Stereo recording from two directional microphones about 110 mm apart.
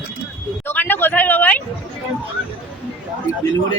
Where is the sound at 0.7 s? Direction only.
15° left (ahead or behind).